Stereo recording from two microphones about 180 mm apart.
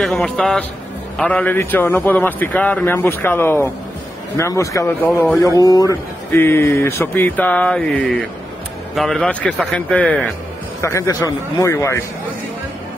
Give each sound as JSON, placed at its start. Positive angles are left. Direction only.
{"t": 0.0, "sound": "a man's voice", "side_deg": 0}
{"t": 8.9, "sound": "a man's voice", "side_deg": 0}